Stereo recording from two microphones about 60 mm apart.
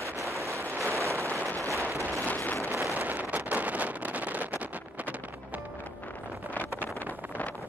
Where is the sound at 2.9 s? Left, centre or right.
Right.